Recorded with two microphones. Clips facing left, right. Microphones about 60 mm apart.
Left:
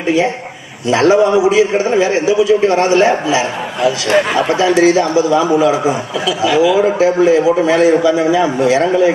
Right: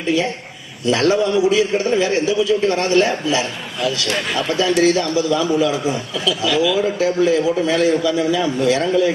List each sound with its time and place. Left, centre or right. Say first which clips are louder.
0.9 s a man's voice: left 6 dB; left